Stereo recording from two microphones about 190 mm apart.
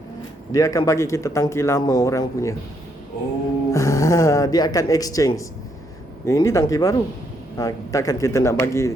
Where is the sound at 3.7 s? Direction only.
15° left (ahead or behind).